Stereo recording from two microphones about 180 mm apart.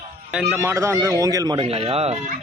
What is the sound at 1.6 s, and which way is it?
Speech, 35° right (ahead or behind).